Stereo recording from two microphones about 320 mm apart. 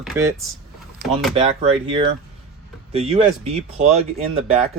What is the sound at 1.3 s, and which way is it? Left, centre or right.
Speech, centre.